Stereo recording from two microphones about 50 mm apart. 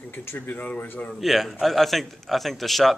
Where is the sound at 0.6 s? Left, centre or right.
Left.